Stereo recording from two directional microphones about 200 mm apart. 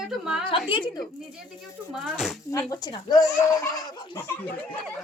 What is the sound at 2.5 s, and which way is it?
Speech, 20° left (ahead or behind).